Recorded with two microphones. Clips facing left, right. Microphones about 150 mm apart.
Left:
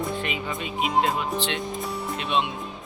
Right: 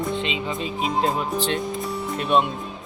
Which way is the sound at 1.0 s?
40° right (ahead or behind).